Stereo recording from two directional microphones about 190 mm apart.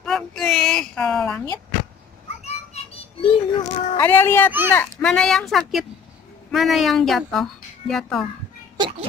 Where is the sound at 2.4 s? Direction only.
30° left (ahead or behind).